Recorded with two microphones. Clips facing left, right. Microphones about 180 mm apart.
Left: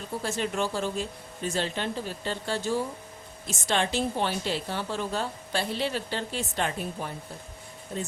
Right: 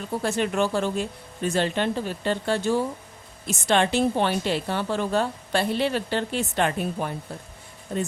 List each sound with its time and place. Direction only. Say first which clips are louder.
0.2 s a woman's voice: right 5 dB; 60° right (ahead or behind)